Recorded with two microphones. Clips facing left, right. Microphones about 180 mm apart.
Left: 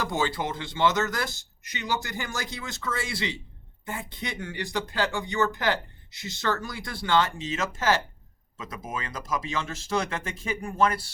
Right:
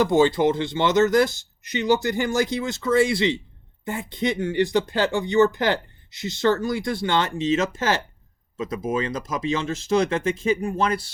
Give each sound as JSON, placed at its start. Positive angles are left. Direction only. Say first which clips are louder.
{"t": 0.0, "sound": "speech", "louder": "right 11 dB", "side_deg": -20}
{"t": 2.3, "sound": "speech", "louder": "right 12 dB", "side_deg": -20}